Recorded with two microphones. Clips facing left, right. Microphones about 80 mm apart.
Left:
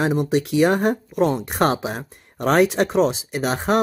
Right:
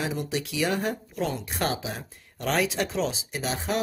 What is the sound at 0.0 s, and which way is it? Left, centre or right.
Speech, left.